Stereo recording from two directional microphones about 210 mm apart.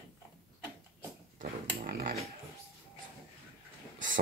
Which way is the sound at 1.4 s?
45° right (ahead or behind).